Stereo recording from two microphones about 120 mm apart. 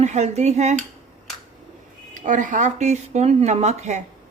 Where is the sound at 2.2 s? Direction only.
90° right; by 4.0 s 75° right (ahead or behind).